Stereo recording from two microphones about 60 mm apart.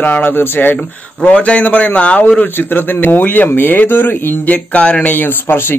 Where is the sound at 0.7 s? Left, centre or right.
Left.